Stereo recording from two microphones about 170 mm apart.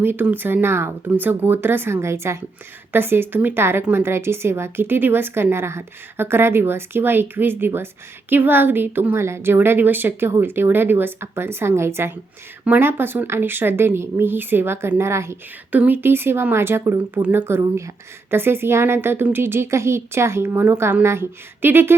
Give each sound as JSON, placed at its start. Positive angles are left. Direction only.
{"t": 0.0, "sound": "speech", "side_deg": -10}